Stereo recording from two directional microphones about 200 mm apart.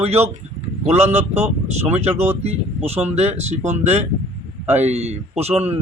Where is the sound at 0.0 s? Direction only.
30° right (ahead or behind).